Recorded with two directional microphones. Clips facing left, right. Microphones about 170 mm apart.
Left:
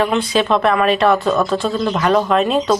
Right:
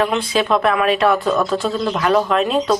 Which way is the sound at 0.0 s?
5° right (ahead or behind).